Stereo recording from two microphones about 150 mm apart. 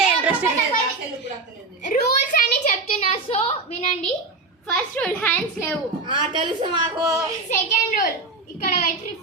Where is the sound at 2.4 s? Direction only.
55° left (ahead or behind).